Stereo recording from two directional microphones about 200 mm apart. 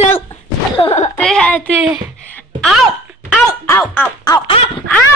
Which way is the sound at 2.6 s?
Centre (ahead or behind).